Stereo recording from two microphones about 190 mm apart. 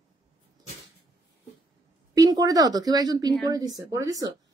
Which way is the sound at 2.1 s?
20° right (ahead or behind).